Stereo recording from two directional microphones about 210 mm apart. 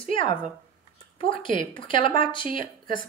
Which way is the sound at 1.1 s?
25° left (ahead or behind).